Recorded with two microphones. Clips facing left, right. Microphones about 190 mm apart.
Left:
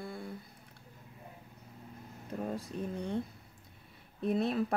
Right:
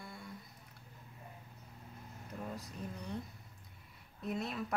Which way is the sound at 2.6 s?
30° left (ahead or behind).